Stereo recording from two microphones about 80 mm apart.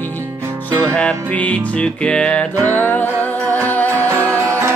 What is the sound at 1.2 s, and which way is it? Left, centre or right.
Music, centre.